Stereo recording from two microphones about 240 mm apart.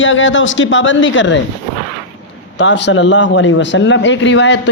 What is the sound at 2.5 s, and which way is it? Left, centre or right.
Speech, left.